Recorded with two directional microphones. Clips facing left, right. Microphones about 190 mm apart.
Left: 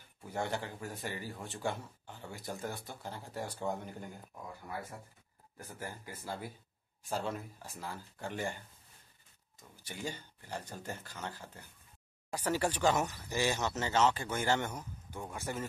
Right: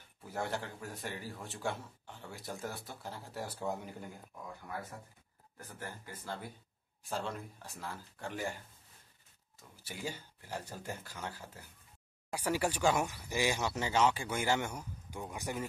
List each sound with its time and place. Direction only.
0.2 s speech: centre (ahead or behind)
5.6 s speech: 10° left (ahead or behind)
9.8 s speech: 5° right (ahead or behind)